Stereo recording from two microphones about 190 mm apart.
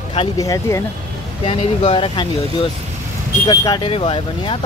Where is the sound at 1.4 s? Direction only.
30° left (ahead or behind).